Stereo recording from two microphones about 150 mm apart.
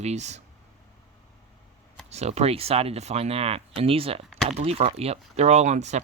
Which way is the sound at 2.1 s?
45° right (ahead or behind).